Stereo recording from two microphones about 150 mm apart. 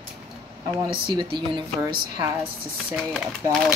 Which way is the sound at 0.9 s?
35° right (ahead or behind).